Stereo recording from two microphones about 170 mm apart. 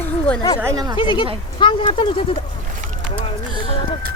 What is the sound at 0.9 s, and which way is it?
Speech, 30° left (ahead or behind).